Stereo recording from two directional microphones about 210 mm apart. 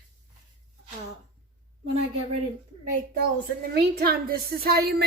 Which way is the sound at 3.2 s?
45° right (ahead or behind).